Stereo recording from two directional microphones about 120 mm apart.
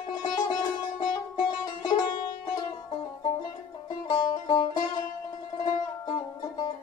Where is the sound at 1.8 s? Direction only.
35° left (ahead or behind).